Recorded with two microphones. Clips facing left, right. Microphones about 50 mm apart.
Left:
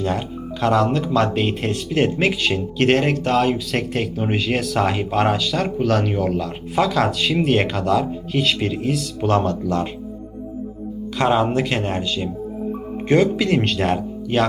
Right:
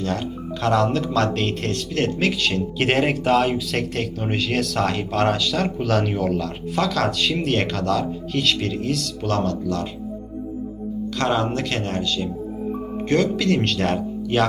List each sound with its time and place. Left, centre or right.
0.0 s speech: centre
2.7 s speech: centre
9.3 s speech: left
11.2 s speech: centre